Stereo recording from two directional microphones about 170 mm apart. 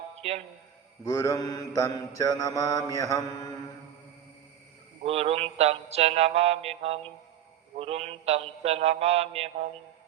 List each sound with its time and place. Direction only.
0.2 s a man's voice: 40° right (ahead or behind)
1.0 s mantra: 20° left (ahead or behind)
5.0 s mantra: 35° right (ahead or behind)